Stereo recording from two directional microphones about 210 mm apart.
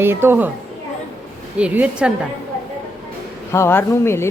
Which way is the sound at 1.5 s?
5° right (ahead or behind).